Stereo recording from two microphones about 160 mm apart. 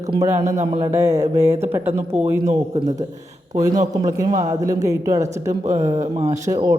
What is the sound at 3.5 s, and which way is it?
A man's voice, 20° right (ahead or behind).